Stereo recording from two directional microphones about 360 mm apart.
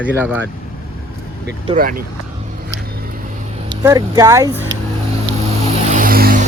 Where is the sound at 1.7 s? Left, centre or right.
Right.